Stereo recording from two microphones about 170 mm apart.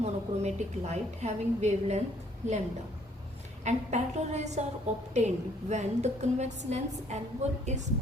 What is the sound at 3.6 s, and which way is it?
A woman's voice, 40° right (ahead or behind).